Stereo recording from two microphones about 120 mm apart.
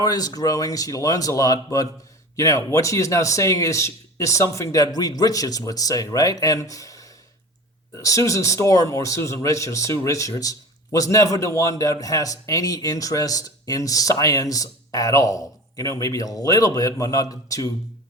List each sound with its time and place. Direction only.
0.0 s a man's voice: 30° left (ahead or behind)